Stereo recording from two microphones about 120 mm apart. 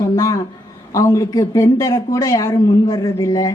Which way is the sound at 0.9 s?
25° left (ahead or behind).